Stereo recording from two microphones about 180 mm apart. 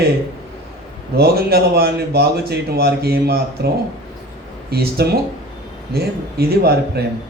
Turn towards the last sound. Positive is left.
turn(degrees=-60)  # may be behind; listen again after turning